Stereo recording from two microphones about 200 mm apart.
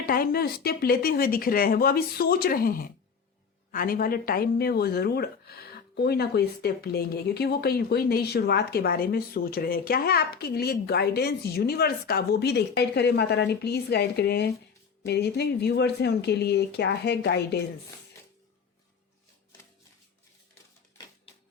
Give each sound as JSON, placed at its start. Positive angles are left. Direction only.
{"t": 0.0, "sound": "speech", "side_deg": 45}